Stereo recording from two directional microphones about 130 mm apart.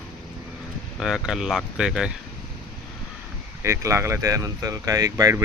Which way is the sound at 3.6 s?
20° right (ahead or behind).